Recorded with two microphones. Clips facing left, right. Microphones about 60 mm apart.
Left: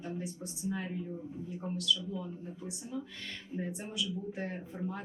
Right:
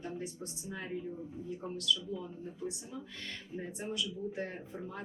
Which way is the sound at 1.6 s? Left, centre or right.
Centre.